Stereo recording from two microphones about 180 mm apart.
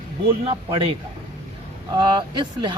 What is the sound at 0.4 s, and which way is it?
Speech, 30° right (ahead or behind).